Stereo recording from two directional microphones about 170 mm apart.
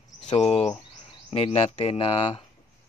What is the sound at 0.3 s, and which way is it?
Speech, 40° left (ahead or behind).